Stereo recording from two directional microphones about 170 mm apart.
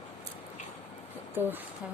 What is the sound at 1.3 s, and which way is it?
Speech, 10° right (ahead or behind).